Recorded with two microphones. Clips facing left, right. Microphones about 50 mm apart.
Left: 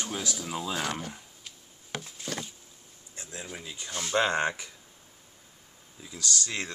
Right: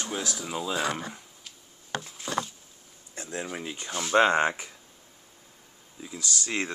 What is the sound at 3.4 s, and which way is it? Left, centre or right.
Speech, right.